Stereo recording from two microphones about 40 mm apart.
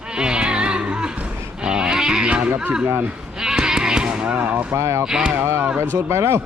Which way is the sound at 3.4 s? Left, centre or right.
Centre.